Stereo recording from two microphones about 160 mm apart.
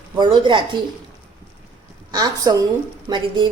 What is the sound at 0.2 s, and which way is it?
Speech, 30° right (ahead or behind).